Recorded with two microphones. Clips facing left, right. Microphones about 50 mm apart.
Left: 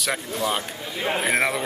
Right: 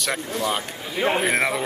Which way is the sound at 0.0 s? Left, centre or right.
Centre.